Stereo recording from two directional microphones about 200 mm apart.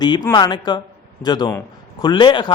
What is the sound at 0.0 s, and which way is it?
A man's voice, 20° left (ahead or behind).